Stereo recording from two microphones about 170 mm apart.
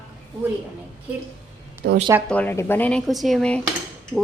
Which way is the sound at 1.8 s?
75° right (ahead or behind).